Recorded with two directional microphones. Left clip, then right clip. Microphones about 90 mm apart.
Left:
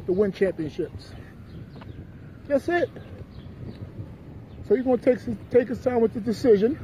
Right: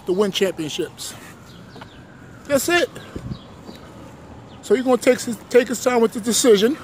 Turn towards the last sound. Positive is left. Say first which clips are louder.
# right 5 dB
turn(degrees=-30)  # may be behind; listen again after turning